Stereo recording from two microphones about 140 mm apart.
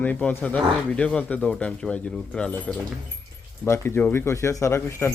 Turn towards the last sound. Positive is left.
turn(degrees=20)  # may be behind; listen again after turning